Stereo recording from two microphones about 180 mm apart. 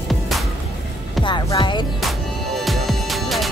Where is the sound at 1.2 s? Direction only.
25° left (ahead or behind).